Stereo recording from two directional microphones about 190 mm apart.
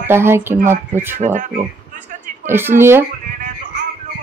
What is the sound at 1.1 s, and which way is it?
Speech, 35° right (ahead or behind).